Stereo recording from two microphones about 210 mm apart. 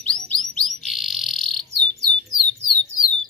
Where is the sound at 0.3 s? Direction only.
Centre (ahead or behind).